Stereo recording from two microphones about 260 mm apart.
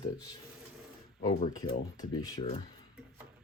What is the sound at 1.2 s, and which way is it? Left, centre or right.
Speech, centre.